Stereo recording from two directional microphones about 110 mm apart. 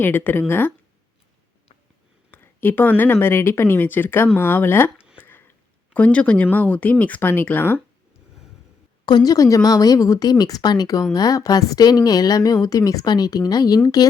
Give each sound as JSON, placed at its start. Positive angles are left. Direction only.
{"t": 0.0, "sound": "speech", "side_deg": 20}
{"t": 2.3, "sound": "speech", "side_deg": 20}
{"t": 4.9, "sound": "a sound", "side_deg": -10}
{"t": 5.2, "sound": "a sound", "side_deg": 20}
{"t": 7.0, "sound": "speech", "side_deg": 15}
{"t": 9.0, "sound": "a woman's voice", "side_deg": 40}